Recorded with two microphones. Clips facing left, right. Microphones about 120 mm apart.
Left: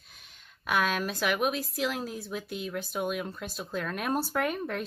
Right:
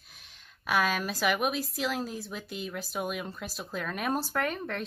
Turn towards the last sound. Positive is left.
turn(degrees=5)  # may be behind; listen again after turning